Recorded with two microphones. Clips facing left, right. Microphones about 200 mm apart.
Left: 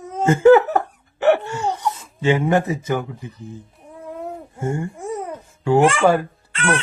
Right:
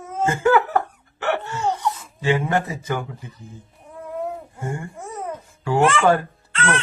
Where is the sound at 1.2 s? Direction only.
15° left (ahead or behind).